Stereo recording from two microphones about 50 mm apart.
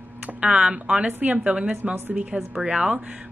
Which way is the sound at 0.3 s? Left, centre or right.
Right.